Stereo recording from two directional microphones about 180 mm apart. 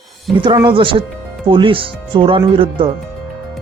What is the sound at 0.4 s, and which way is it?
Speech, 25° right (ahead or behind).